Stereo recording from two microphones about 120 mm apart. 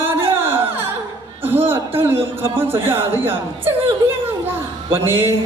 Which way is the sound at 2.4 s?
20° right (ahead or behind).